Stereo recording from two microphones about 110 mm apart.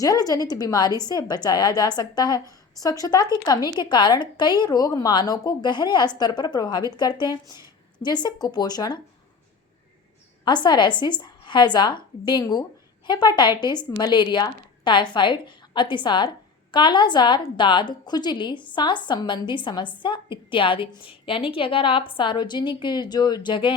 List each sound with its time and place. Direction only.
0.0 s speech: 35° left (ahead or behind)
10.4 s a woman's voice: 45° left (ahead or behind)